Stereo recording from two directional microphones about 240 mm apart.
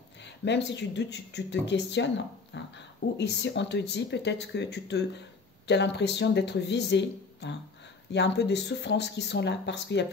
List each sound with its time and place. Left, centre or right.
0.2 s speech: left
2.5 s a sound: left
3.2 s speech: left